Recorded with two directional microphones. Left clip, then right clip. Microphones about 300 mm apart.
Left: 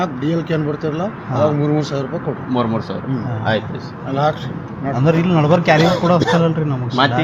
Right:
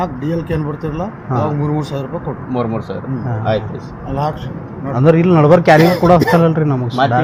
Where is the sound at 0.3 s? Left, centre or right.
Centre.